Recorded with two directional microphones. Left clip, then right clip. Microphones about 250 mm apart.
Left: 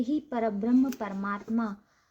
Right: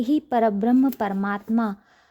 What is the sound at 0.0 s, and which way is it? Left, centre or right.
A woman's voice, right.